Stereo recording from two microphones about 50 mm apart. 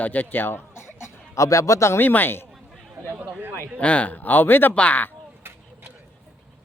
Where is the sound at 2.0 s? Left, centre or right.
Left.